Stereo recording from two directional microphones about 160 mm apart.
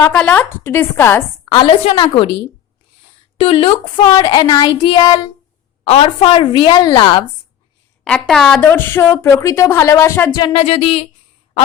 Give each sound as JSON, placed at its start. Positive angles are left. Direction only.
{"t": 0.0, "sound": "speech", "side_deg": 10}
{"t": 1.5, "sound": "a woman's voice", "side_deg": 35}
{"t": 3.3, "sound": "speech", "side_deg": 35}
{"t": 5.8, "sound": "a woman's voice", "side_deg": 35}
{"t": 8.0, "sound": "speech", "side_deg": 5}
{"t": 10.3, "sound": "a woman's voice", "side_deg": 35}